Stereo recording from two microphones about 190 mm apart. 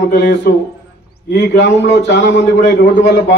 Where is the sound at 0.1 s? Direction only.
55° left (ahead or behind).